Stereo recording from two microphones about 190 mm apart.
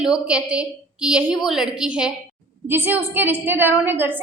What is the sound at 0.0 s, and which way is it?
A woman's voice, 5° right (ahead or behind).